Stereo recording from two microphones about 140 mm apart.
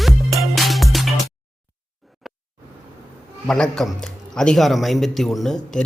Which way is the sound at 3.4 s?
5° left (ahead or behind).